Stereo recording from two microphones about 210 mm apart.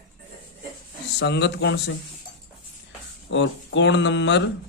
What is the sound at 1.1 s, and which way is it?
Speech, 55° left (ahead or behind).